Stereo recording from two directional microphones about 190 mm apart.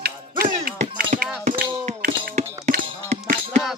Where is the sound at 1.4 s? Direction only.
50° right (ahead or behind).